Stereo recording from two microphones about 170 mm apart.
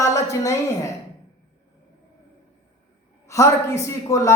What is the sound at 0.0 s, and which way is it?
Speech, 20° left (ahead or behind).